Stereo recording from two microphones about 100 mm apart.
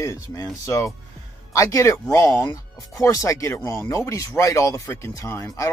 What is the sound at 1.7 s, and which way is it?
Speech, 30° left (ahead or behind).